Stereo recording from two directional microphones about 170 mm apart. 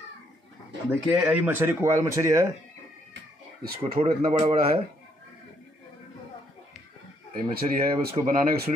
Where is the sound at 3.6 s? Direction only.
60° right (ahead or behind).